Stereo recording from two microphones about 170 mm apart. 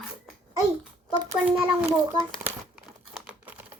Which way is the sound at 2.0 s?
20° right (ahead or behind).